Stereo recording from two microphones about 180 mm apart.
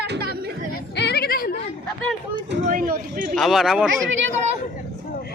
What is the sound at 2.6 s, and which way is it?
Speech, 50° right (ahead or behind).